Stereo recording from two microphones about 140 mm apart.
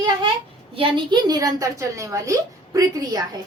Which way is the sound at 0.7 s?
40° right (ahead or behind).